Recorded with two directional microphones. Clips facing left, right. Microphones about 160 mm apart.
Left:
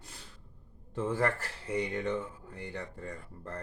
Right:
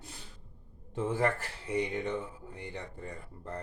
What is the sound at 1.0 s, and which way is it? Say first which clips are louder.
Speech: right 1 dB; 20° right (ahead or behind).